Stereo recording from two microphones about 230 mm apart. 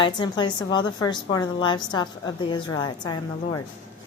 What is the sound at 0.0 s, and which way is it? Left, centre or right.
A woman's voice, centre.